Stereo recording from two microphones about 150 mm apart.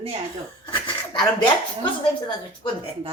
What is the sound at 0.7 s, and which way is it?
Speech, 35° left (ahead or behind).